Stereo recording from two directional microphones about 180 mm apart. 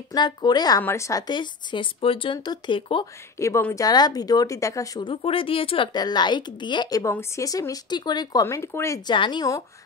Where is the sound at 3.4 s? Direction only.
15° left (ahead or behind).